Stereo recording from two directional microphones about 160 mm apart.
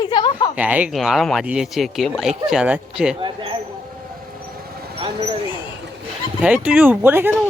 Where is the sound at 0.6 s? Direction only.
10° right (ahead or behind).